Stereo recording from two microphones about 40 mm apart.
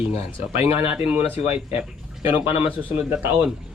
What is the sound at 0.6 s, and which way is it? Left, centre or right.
Speech, right.